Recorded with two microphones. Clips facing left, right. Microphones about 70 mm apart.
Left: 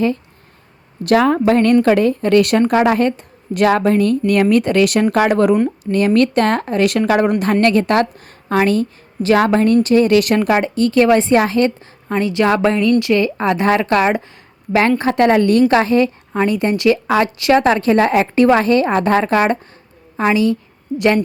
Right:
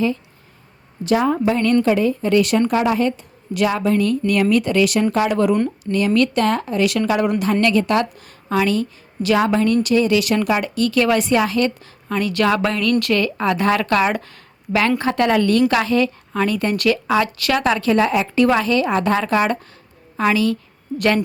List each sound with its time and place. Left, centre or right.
1.0 s a woman's voice: left
10.6 s a woman's voice: left
17.6 s a woman's voice: left
18.0 s a woman's voice: left
20.1 s speech: left